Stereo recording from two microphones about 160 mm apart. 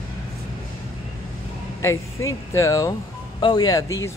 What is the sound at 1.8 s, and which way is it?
Speech, 20° left (ahead or behind).